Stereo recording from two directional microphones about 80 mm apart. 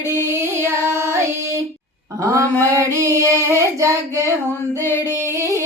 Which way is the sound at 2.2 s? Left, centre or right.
Right.